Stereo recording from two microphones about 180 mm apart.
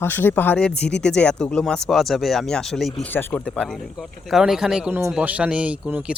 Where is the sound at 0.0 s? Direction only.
10° left (ahead or behind).